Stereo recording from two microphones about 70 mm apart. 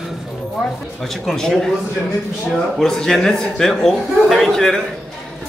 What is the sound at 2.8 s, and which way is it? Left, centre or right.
A man's voice, centre.